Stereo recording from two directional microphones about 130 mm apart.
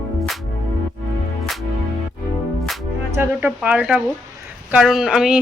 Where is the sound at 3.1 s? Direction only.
15° right (ahead or behind).